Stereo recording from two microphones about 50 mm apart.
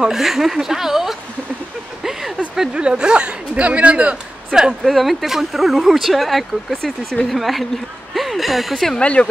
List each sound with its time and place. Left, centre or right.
0.0 s speech: centre
2.5 s speech: centre
4.8 s speech: centre
8.1 s a sound: centre
8.9 s speech: left